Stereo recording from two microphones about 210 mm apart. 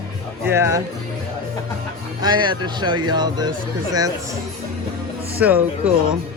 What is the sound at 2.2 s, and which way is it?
Speech, 20° right (ahead or behind).